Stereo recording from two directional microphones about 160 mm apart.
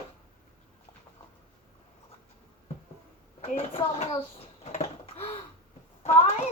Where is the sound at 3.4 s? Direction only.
35° left (ahead or behind).